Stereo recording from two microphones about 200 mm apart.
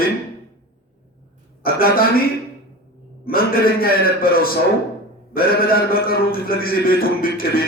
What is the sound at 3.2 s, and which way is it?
A man's voice, 45° left (ahead or behind).